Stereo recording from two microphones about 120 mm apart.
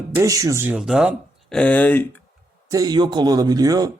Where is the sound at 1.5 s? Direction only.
10° left (ahead or behind).